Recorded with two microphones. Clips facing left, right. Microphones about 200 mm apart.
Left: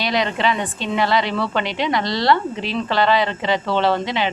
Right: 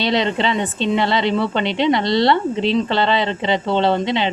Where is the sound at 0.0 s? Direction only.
25° right (ahead or behind).